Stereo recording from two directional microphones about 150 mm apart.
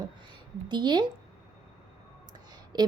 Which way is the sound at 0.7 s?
30° right (ahead or behind).